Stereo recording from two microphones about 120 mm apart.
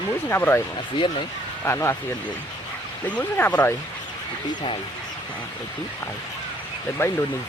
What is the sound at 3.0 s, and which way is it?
Speech, 15° left (ahead or behind).